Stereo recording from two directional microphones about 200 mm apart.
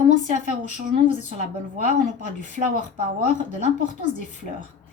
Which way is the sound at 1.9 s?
40° right (ahead or behind).